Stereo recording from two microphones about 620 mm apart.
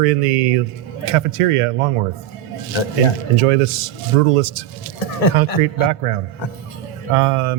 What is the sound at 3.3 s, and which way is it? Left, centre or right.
Speech, right.